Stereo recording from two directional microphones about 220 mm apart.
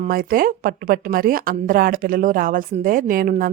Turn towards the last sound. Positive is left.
turn(degrees=-40)  # may be behind; listen again after turning